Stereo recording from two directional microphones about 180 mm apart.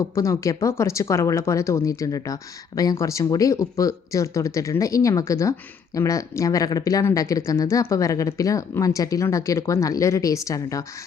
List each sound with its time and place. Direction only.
0.0 s speech: 15° left (ahead or behind)